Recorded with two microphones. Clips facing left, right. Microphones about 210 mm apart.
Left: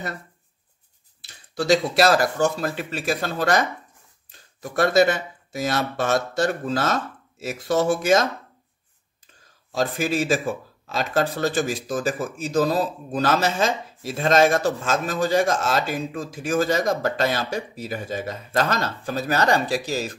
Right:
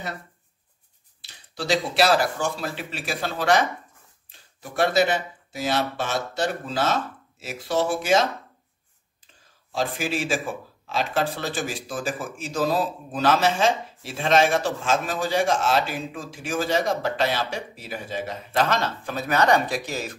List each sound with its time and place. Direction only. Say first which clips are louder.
1.5 s speech: left 5 dB; 45° left (ahead or behind)
9.7 s speech: left 3 dB; 45° left (ahead or behind)